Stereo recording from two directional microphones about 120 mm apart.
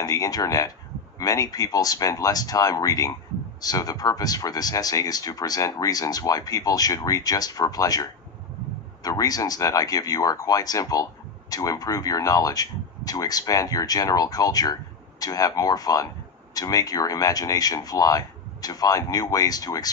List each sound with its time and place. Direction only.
0.0 s speech: 30° left (ahead or behind)